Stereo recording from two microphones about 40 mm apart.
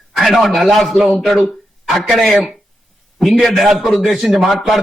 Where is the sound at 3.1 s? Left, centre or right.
Centre.